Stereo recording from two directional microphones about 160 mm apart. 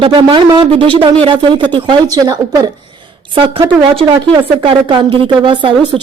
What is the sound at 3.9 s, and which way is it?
A woman's voice, 30° right (ahead or behind).